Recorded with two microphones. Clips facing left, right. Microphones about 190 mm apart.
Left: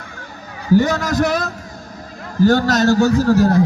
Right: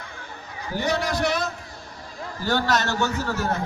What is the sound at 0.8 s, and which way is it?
Speech, 45° left (ahead or behind).